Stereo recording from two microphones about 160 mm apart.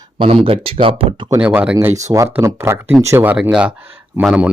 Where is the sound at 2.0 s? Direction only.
20° right (ahead or behind).